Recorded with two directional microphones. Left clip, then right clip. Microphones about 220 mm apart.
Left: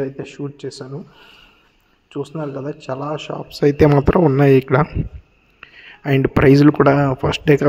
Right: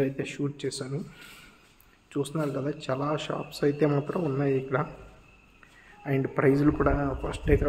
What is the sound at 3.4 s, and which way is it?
Speech, 35° left (ahead or behind).